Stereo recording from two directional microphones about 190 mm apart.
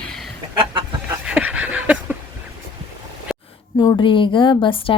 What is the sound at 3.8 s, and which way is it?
A woman's voice, 20° left (ahead or behind).